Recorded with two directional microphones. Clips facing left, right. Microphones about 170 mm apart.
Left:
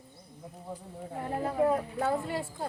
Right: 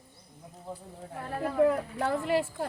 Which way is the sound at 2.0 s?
80° right.